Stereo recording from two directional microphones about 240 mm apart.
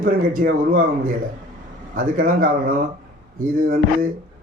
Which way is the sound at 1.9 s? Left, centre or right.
Right.